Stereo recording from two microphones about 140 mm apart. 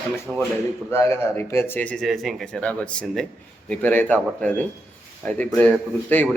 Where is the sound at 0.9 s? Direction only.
15° left (ahead or behind).